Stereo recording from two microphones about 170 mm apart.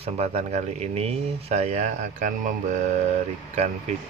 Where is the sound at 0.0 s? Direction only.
40° right (ahead or behind).